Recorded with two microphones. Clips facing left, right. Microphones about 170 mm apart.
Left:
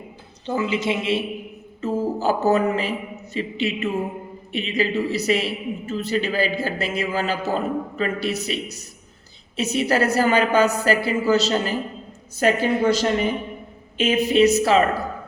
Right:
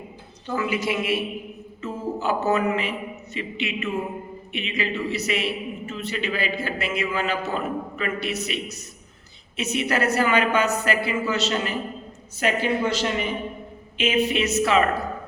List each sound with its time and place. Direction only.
0.4 s a woman's voice: 25° left (ahead or behind)
1.8 s a sound: 35° left (ahead or behind)
3.3 s a woman's voice: 35° left (ahead or behind)